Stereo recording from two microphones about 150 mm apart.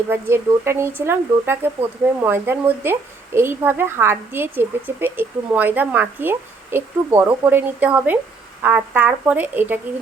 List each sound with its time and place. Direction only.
0.1 s a woman's voice: 15° right (ahead or behind)